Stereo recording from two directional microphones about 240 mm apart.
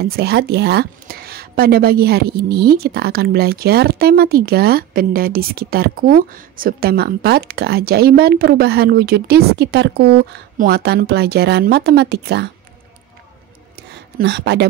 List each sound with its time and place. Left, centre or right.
0.0 s a woman's voice: right
14.1 s speech: right